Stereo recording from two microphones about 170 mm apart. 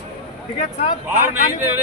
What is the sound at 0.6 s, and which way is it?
Speech, 40° left (ahead or behind).